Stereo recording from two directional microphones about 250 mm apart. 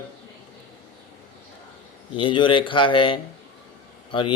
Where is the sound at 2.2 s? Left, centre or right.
Centre.